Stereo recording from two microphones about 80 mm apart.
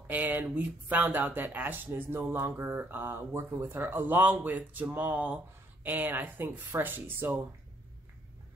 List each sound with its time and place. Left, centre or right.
0.0 s speech: right